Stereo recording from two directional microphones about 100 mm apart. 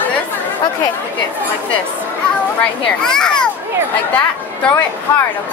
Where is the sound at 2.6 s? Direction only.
5° left (ahead or behind).